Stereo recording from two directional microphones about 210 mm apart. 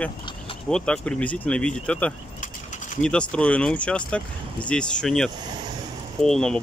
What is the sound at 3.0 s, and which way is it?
Speech, 5° left (ahead or behind).